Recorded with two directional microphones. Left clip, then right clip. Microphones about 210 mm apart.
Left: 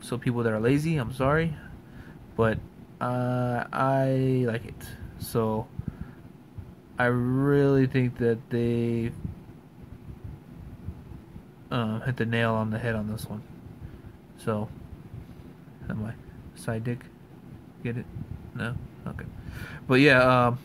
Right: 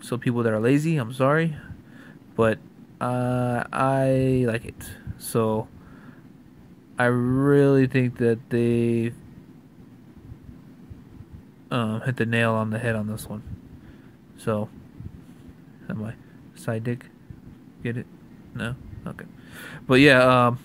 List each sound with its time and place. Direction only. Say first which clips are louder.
0.0 s speech: right 3 dB; 15° right (ahead or behind)
7.0 s speech: right 3 dB; 15° right (ahead or behind)
11.7 s speech: right 3 dB; 15° right (ahead or behind)
14.4 s speech: right 4 dB; 15° right (ahead or behind)
15.9 s speech: right 2 dB; 15° right (ahead or behind)